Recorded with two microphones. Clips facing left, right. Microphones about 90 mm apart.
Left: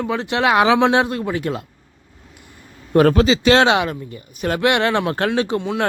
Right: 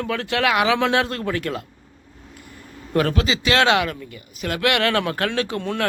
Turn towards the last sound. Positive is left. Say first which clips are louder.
# left 4 dB
turn(degrees=20)  # may be behind; listen again after turning